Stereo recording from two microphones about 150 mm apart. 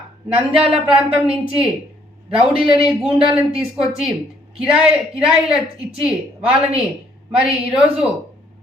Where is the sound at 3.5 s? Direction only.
40° right (ahead or behind).